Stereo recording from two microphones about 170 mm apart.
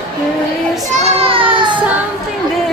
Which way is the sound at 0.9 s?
30° right (ahead or behind).